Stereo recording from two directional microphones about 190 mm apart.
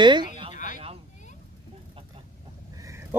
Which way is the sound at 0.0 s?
25° right (ahead or behind).